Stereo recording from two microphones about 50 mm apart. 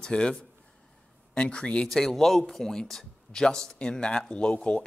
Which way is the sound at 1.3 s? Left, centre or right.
Centre.